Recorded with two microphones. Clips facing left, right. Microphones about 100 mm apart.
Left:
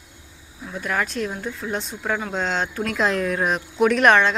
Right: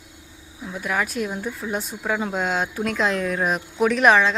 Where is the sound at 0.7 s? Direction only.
10° right (ahead or behind).